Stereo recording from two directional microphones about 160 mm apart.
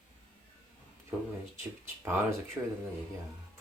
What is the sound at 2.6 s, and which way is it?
Speech, 15° right (ahead or behind).